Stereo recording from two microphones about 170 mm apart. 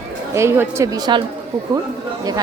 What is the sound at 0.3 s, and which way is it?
Speech, 15° right (ahead or behind).